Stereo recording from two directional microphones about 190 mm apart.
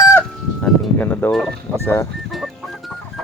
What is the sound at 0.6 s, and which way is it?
Speech, 10° left (ahead or behind).